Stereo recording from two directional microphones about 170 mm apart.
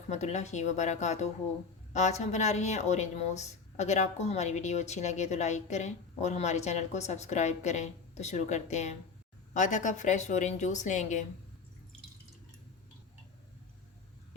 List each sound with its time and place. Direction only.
0.1 s speech: 45° left (ahead or behind)